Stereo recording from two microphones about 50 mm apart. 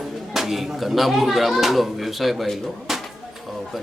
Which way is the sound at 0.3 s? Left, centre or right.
Centre.